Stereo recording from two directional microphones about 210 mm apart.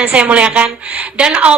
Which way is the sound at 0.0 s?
5° right (ahead or behind).